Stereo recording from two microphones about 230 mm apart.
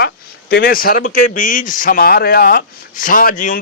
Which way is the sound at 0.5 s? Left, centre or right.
Left.